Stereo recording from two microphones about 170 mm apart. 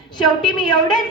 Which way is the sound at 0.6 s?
25° left (ahead or behind).